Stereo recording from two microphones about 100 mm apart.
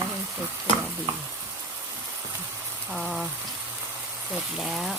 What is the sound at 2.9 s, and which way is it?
Speech, centre (ahead or behind).